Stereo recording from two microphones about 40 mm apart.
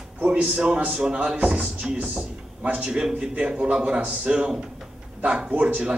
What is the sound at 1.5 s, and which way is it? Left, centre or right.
Speech, centre.